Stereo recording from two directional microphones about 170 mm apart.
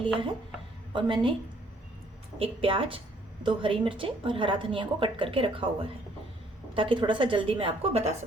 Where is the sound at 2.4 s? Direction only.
30° right (ahead or behind).